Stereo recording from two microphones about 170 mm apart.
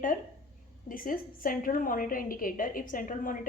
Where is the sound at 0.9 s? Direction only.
55° left (ahead or behind).